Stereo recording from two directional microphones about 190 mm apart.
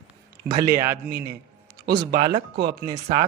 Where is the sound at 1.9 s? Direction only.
25° right (ahead or behind).